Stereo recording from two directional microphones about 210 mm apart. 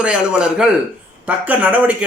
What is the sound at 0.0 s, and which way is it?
Speech, 5° right (ahead or behind).